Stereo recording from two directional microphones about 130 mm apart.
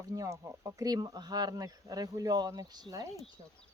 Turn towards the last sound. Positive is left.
turn(degrees=-30)  # may be behind; listen again after turning